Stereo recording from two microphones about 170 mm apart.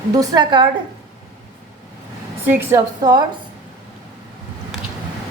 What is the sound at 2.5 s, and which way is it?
Speech, 15° right (ahead or behind).